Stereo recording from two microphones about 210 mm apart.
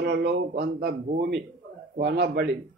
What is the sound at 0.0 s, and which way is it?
A man's voice, 50° right (ahead or behind).